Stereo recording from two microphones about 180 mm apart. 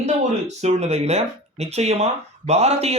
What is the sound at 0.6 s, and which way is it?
Speech, 40° right (ahead or behind).